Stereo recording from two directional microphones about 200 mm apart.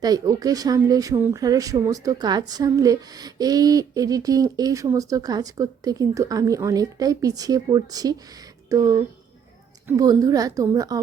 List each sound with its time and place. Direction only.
0.0 s speech: 20° right (ahead or behind)